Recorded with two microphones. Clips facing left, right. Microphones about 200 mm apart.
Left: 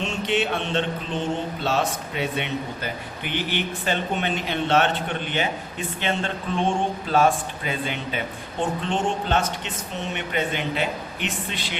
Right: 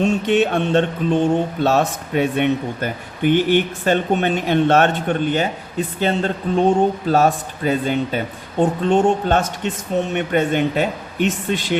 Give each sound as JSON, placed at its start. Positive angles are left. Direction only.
{"t": 0.0, "sound": "mantra", "side_deg": -45}
{"t": 6.0, "sound": "a man's voice", "side_deg": -40}
{"t": 10.2, "sound": "mantra", "side_deg": -50}